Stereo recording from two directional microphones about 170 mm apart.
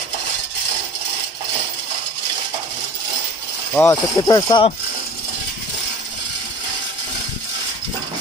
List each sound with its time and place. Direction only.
3.7 s speech: 20° left (ahead or behind)